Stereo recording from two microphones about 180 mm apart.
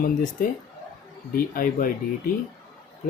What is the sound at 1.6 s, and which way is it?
Speech, 50° left (ahead or behind).